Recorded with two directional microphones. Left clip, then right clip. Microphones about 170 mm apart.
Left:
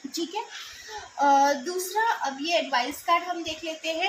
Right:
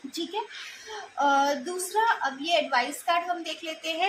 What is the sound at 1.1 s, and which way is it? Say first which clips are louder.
A woman's voice: left 3 dB; 15° right (ahead or behind).